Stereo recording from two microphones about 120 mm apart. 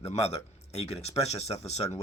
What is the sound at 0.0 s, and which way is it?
Speech, 65° left (ahead or behind).